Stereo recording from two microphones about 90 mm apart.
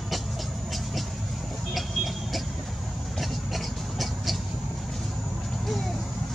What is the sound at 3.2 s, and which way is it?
Rub, centre (ahead or behind).